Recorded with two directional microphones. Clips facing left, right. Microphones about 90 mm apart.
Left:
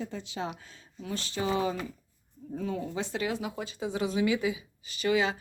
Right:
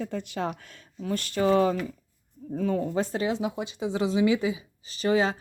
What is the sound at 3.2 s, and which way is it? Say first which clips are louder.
Speech: right 5 dB; 25° right (ahead or behind).